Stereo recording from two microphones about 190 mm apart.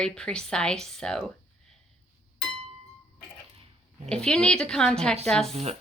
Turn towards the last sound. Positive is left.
turn(degrees=-35)  # may be behind; listen again after turning